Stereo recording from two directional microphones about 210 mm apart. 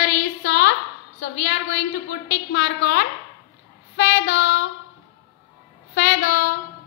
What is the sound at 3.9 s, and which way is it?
Child singing, 60° left (ahead or behind).